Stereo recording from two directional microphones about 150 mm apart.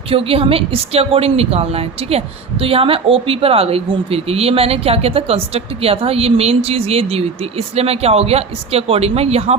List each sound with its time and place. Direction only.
0.1 s a woman's voice: 40° right (ahead or behind)